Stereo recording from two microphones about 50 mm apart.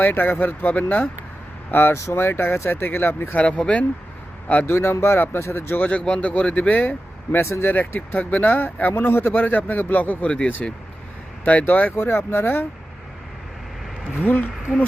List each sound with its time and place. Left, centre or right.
0.0 s a man's voice: left
1.7 s speech: left
3.3 s speech: left
4.6 s speech: left
5.8 s speech: left
7.3 s a man's voice: left
8.9 s a man's voice: left
10.2 s speech: left
11.4 s speech: left
14.2 s a man's voice: left